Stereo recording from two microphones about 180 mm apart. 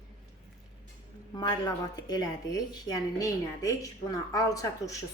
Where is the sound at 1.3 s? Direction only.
20° left (ahead or behind).